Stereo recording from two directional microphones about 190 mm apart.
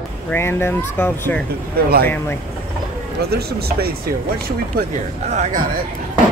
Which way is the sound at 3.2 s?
55° right (ahead or behind).